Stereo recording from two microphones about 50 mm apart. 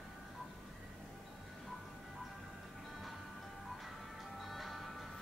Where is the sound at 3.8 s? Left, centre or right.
Centre.